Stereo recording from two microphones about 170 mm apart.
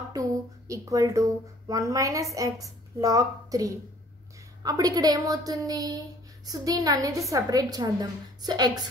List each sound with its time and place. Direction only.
0.1 s a woman's voice: 20° right (ahead or behind)